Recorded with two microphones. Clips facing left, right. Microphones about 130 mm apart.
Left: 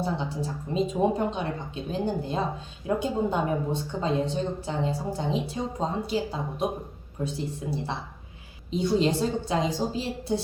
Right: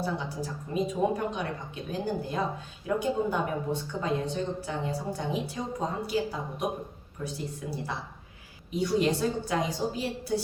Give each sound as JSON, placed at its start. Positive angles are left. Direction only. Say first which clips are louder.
{"t": 0.0, "sound": "a woman's voice", "louder": "left 3 dB", "side_deg": 25}